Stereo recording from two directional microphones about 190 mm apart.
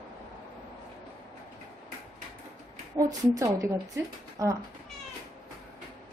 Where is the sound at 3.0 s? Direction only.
20° right (ahead or behind).